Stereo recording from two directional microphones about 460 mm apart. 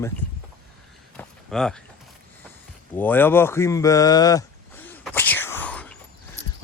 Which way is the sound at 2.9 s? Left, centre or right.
Centre.